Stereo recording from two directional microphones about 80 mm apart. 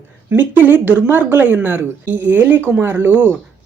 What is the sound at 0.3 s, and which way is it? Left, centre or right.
Speech, right.